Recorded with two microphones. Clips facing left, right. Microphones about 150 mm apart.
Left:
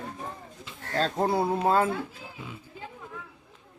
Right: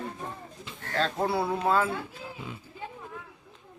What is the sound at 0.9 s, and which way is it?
Speech, 40° left (ahead or behind).